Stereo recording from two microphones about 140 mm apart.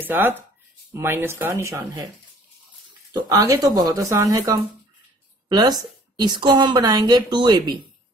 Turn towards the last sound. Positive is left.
turn(degrees=-30)  # may be behind; listen again after turning